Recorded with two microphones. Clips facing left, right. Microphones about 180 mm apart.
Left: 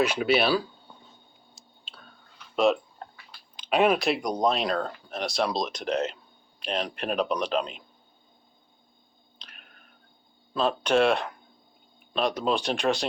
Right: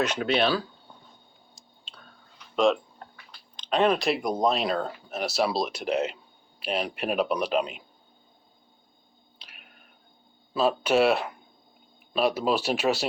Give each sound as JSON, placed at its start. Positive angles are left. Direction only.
{"t": 0.0, "sound": "speech", "side_deg": 10}
{"t": 1.9, "sound": "chewing", "side_deg": 5}
{"t": 3.6, "sound": "speech", "side_deg": 10}
{"t": 9.4, "sound": "a sound", "side_deg": -5}
{"t": 10.5, "sound": "speech", "side_deg": -5}